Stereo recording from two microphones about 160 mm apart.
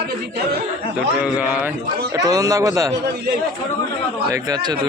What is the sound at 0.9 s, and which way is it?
Speech, 10° right (ahead or behind).